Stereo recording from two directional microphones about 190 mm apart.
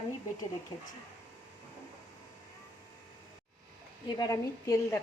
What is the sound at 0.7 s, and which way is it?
Speech, 20° left (ahead or behind).